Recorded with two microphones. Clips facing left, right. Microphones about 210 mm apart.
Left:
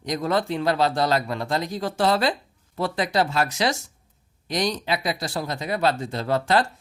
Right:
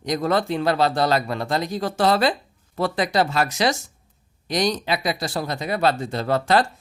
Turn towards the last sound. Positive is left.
turn(degrees=-70)  # may be behind; listen again after turning